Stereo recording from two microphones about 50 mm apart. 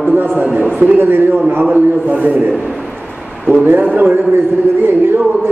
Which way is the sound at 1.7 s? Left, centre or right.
Right.